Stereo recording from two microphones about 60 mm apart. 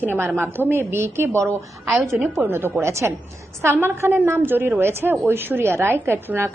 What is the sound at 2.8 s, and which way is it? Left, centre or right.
A woman's voice, right.